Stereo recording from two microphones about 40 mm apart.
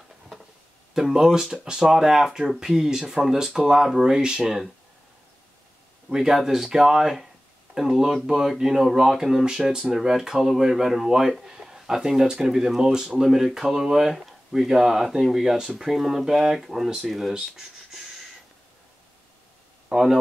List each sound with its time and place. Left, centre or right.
0.9 s speech: centre
6.0 s speech: centre
9.7 s speech: centre
19.9 s speech: centre